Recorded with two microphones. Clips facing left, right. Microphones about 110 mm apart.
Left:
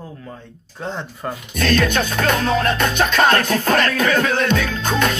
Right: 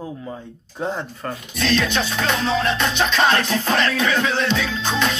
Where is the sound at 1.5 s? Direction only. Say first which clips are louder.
Left 3 dB; 50° left (ahead or behind).